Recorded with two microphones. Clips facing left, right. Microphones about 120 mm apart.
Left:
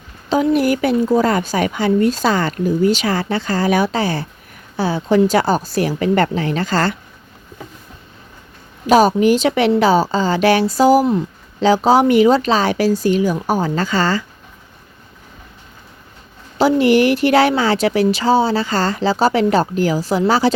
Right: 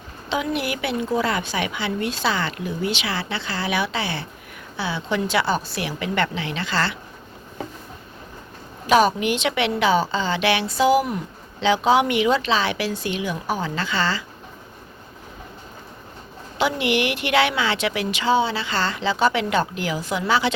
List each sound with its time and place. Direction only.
0.5 s a woman's voice: 40° left (ahead or behind)
8.9 s a woman's voice: 40° left (ahead or behind)
16.6 s a woman's voice: 40° left (ahead or behind)